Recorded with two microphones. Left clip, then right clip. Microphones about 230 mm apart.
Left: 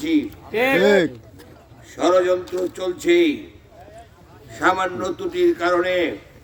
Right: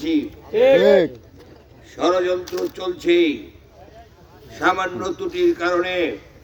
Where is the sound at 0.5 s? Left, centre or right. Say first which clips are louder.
Right 5 dB; left.